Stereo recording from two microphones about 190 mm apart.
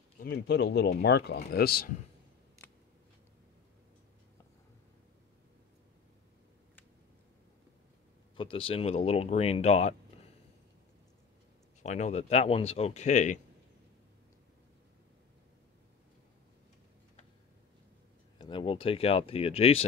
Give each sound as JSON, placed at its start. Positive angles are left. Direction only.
{"t": 0.2, "sound": "speech", "side_deg": 60}
{"t": 8.4, "sound": "speech", "side_deg": 25}
{"t": 11.8, "sound": "speech", "side_deg": 40}
{"t": 18.4, "sound": "speech", "side_deg": 25}